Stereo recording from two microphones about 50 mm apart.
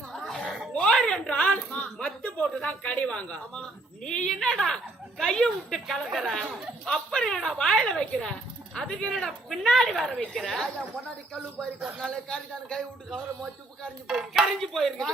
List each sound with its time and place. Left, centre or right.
0.1 s a sound: centre
2.4 s speech: left; by 10.8 s centre
11.9 s speech: centre
13.1 s speech: centre
14.1 s speech: centre
14.6 s speech: centre